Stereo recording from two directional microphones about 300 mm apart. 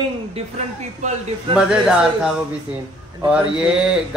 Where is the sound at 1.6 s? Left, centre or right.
Centre.